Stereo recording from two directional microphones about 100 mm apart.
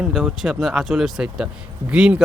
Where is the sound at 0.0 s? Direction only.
5° right (ahead or behind).